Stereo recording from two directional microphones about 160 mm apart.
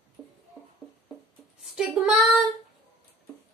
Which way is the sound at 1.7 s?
5° right (ahead or behind).